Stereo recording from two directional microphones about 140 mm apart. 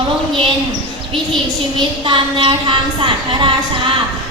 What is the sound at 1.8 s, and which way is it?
A woman's voice, 35° right (ahead or behind).